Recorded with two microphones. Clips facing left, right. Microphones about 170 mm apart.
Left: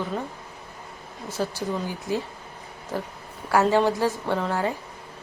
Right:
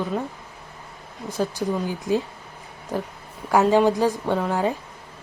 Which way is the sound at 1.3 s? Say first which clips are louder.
Right 3 dB; 15° right (ahead or behind).